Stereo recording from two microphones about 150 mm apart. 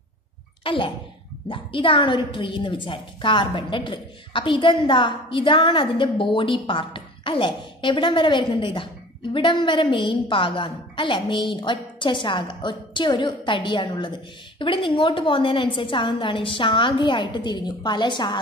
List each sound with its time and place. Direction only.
0.7 s a woman's voice: 35° left (ahead or behind)